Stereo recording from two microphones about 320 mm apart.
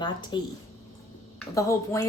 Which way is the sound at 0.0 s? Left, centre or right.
Centre.